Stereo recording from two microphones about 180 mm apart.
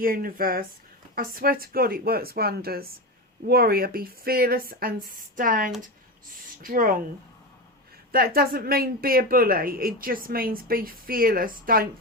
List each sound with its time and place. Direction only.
0.0 s speech: 55° right (ahead or behind)
8.1 s speech: 55° right (ahead or behind)